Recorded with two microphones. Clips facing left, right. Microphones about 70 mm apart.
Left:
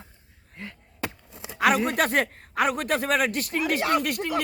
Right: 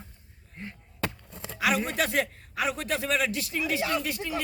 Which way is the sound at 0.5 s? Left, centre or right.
Left.